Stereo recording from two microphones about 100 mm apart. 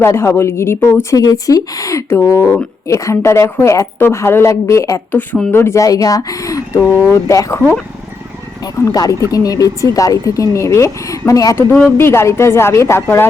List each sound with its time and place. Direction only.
0.0 s speech: 25° left (ahead or behind)
5.1 s speech: 15° left (ahead or behind); by 7.6 s 30° left (ahead or behind)
8.8 s speech: 40° left (ahead or behind)